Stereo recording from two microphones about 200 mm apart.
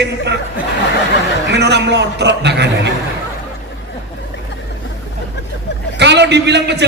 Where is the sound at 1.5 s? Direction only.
55° right (ahead or behind).